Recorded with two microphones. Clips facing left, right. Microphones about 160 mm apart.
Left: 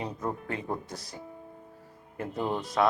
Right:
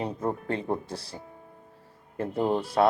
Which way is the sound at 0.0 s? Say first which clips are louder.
Right 4 dB; 30° right (ahead or behind).